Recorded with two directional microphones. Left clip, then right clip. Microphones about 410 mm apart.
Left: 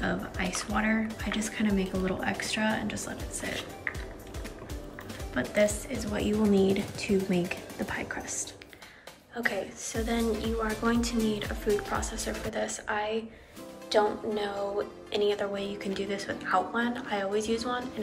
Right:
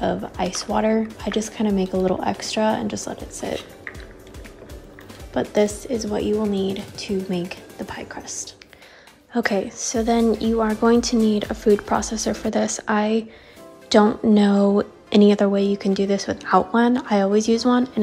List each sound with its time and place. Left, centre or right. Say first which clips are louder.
0.0 s speech: right 8 dB; centre
5.3 s speech: right 6 dB; centre